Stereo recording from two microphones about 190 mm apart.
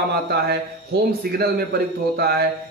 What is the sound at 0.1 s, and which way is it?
A man's voice, 60° right (ahead or behind).